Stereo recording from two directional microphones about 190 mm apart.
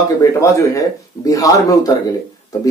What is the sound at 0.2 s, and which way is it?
A man's voice, 15° left (ahead or behind).